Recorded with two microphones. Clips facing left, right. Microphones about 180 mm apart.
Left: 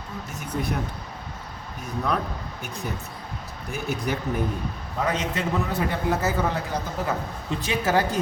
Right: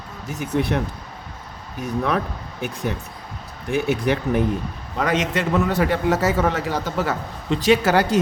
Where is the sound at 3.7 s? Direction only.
80° right.